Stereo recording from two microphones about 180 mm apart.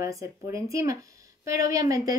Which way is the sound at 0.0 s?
15° right (ahead or behind).